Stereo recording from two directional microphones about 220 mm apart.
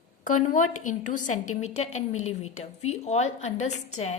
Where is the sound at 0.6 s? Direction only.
80° left.